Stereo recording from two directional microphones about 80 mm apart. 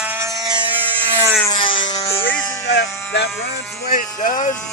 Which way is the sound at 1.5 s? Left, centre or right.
Left.